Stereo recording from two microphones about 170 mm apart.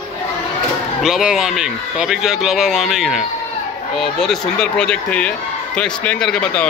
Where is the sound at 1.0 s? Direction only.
Centre (ahead or behind).